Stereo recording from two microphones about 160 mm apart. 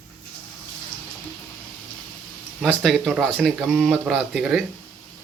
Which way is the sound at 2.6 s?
Centre (ahead or behind).